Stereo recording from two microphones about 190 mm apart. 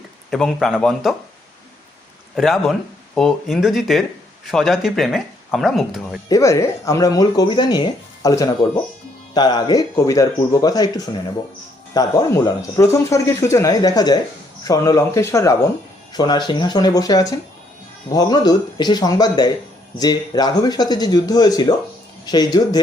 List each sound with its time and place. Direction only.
0.3 s speech: centre (ahead or behind)
2.3 s speech: centre (ahead or behind)
6.2 s speech: 15° left (ahead or behind)